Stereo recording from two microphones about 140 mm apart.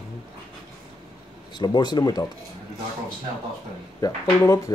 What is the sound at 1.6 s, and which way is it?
Speech, 30° left (ahead or behind).